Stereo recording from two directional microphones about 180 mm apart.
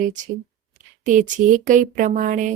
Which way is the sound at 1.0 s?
45° right (ahead or behind).